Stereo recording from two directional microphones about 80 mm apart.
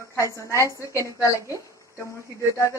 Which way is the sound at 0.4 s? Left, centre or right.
Left.